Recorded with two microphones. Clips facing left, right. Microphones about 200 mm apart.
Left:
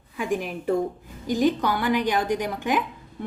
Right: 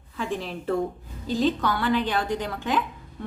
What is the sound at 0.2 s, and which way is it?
A woman's voice, 15° left (ahead or behind).